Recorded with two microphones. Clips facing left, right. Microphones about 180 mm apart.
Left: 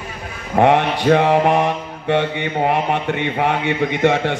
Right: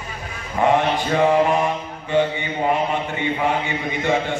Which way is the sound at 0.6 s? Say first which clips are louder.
Left 3 dB; 65° left (ahead or behind).